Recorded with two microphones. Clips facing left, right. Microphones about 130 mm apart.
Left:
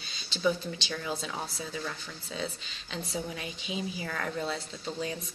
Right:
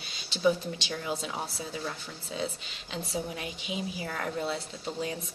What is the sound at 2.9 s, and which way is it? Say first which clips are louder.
Speech: right 1 dB; 10° right (ahead or behind).